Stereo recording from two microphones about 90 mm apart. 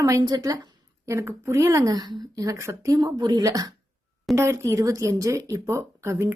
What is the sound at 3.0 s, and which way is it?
A woman's voice, 45° right (ahead or behind).